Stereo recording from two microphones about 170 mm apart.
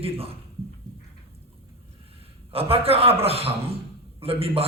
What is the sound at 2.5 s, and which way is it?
A man's voice, 35° right (ahead or behind).